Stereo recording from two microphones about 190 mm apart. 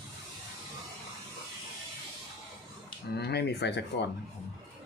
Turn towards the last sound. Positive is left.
turn(degrees=65)  # may be behind; listen again after turning